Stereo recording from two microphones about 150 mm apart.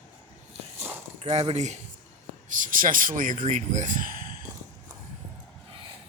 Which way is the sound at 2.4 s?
60° right (ahead or behind).